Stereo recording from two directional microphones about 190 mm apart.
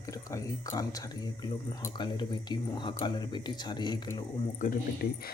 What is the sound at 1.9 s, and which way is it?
Speech, 25° left (ahead or behind).